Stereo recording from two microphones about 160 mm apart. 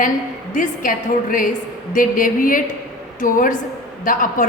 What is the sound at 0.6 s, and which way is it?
A woman's voice, 55° left (ahead or behind).